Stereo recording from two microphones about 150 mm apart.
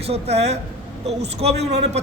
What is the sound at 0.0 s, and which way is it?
A man's voice, 45° right (ahead or behind).